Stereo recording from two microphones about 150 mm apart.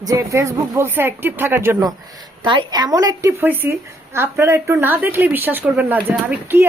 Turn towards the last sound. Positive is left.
turn(degrees=-15)  # may be behind; listen again after turning